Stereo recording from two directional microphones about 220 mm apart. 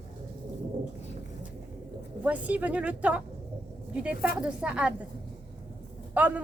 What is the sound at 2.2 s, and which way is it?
A woman's voice, 5° right (ahead or behind).